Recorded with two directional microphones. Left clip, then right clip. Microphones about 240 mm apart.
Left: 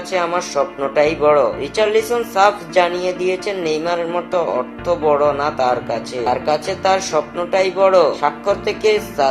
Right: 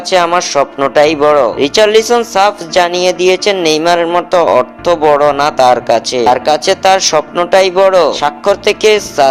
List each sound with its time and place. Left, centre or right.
0.1 s a man's voice: right